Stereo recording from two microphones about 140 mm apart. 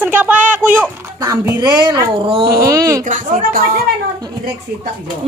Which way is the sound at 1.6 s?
30° right (ahead or behind).